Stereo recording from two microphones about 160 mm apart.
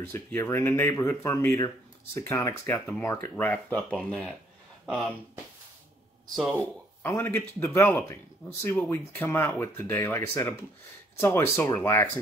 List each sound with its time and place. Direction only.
0.0 s speech: 15° left (ahead or behind)
3.9 s speech: centre (ahead or behind)
6.3 s speech: centre (ahead or behind)
7.0 s speech: 15° left (ahead or behind)